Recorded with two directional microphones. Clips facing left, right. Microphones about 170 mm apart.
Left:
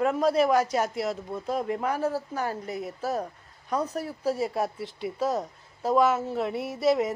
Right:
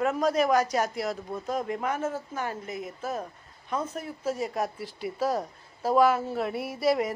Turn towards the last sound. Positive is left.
turn(degrees=20)  # may be behind; listen again after turning